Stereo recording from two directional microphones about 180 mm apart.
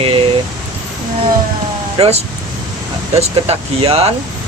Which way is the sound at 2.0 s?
30° right (ahead or behind).